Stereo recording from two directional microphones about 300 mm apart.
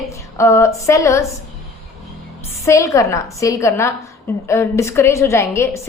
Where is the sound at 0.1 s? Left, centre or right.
Centre.